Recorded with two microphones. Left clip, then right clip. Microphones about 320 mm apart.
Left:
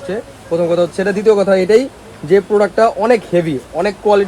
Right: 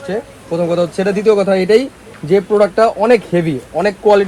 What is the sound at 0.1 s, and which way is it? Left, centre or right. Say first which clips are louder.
Speech: left 1 dB; right.